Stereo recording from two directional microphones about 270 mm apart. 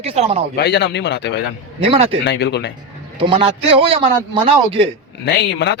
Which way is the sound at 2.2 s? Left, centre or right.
Left.